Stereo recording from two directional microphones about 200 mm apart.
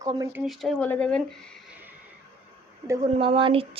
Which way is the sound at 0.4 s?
Centre (ahead or behind).